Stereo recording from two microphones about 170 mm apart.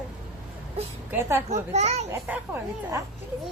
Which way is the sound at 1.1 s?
15° right (ahead or behind).